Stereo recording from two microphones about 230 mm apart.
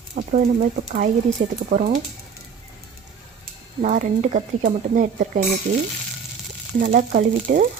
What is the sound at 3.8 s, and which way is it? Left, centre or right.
A woman's voice, right.